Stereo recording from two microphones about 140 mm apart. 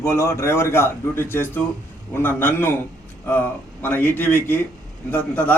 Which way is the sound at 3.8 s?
15° left (ahead or behind).